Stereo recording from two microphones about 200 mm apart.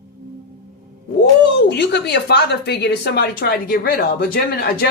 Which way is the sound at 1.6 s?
55° left (ahead or behind).